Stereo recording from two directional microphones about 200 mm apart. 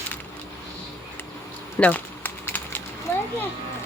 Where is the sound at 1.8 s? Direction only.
10° left (ahead or behind).